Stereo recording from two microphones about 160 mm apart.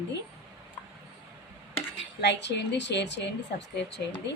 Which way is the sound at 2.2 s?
90° left.